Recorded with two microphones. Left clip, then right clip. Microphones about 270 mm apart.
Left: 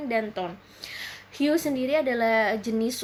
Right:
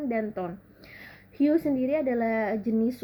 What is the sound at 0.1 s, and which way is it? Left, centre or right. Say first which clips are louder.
Speech: left 7 dB; centre.